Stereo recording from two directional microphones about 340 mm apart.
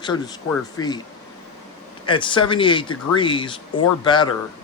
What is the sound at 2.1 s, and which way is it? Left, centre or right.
Speech, centre.